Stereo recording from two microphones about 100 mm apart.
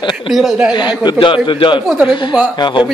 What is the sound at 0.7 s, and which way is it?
A man's voice, 50° left (ahead or behind).